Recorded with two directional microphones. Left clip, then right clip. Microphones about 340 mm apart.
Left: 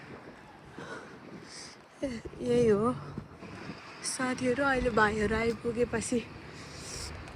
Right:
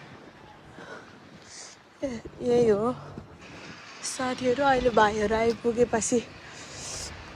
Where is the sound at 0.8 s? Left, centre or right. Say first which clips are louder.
Even; centre.